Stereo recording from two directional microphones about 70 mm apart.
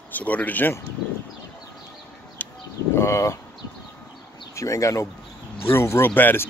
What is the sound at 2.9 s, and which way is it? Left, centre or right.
Speech, left.